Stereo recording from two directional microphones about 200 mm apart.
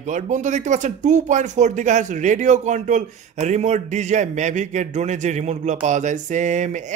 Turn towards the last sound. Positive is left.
turn(degrees=-35)  # may be behind; listen again after turning